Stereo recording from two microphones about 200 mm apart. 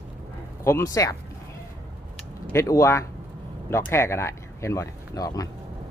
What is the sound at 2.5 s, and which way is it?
Speech, 15° left (ahead or behind).